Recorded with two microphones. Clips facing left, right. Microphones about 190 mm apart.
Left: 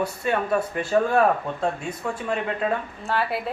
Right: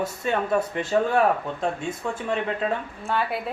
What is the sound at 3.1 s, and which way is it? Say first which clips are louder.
Speech: left 1 dB; centre (ahead or behind).